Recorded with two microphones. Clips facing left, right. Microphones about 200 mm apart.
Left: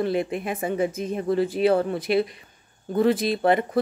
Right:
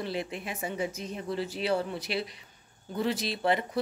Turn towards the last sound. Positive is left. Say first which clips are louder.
# left 7 dB
turn(degrees=50)  # may be behind; listen again after turning